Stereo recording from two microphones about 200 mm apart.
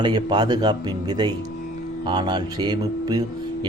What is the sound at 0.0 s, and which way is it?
Speech, 20° right (ahead or behind).